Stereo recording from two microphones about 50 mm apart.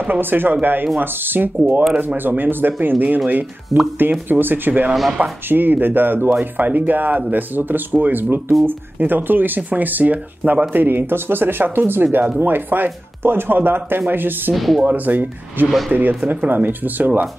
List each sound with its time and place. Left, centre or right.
0.0 s speech: right
3.7 s speech: centre
4.1 s speech: right
14.5 s speech: centre
14.9 s speech: right